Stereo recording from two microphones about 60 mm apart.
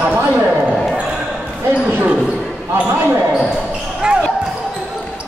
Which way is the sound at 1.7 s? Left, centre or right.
Centre.